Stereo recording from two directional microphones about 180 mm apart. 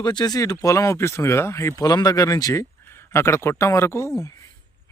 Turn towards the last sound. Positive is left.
turn(degrees=15)  # may be behind; listen again after turning